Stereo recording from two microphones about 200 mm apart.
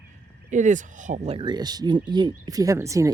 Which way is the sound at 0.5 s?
40° right (ahead or behind).